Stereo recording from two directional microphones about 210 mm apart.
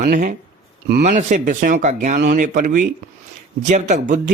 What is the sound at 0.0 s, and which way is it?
Speech, 40° right (ahead or behind).